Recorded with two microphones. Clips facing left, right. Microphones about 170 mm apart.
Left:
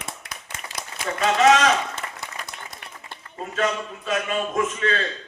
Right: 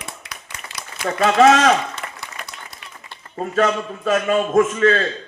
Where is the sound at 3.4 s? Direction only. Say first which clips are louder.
Right 6 dB; 40° right (ahead or behind).